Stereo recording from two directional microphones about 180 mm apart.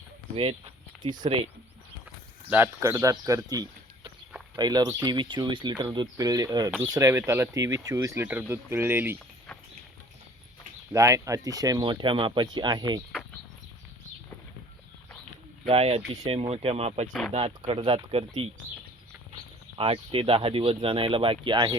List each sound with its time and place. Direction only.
1.0 s speech: 25° right (ahead or behind)
2.5 s speech: 15° right (ahead or behind)
10.9 s speech: 15° right (ahead or behind)
15.6 s speech: 35° right (ahead or behind)
19.7 s speech: 30° right (ahead or behind)